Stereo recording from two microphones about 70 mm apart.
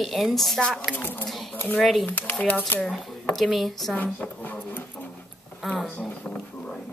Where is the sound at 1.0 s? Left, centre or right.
Left.